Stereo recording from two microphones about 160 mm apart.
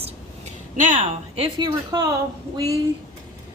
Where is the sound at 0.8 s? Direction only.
50° right (ahead or behind).